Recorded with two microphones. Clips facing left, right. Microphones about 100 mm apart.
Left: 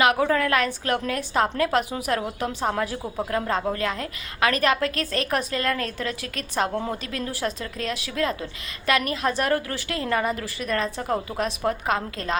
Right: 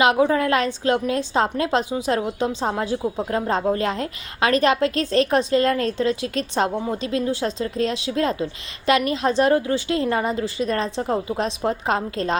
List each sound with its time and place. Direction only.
0.0 s a woman's voice: 25° right (ahead or behind)